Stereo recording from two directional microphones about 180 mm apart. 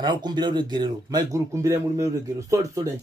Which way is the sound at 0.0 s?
25° right (ahead or behind).